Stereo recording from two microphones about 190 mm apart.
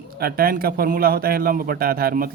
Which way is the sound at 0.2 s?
50° right (ahead or behind).